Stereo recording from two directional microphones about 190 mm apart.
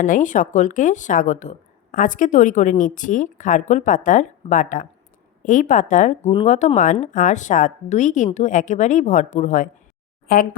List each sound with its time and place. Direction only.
0.0 s speech: 40° left (ahead or behind)